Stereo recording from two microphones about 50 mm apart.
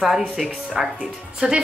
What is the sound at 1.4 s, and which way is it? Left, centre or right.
Speech, centre.